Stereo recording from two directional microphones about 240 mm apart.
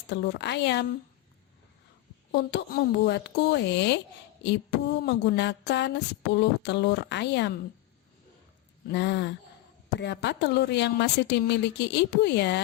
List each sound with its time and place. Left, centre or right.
0.1 s a woman's voice: left
2.3 s a woman's voice: left
8.9 s a woman's voice: left